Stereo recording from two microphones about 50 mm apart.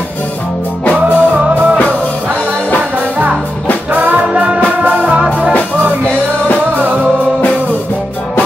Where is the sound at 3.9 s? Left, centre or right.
Right.